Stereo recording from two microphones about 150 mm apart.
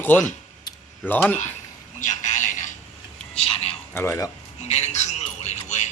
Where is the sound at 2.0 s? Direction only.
55° left (ahead or behind).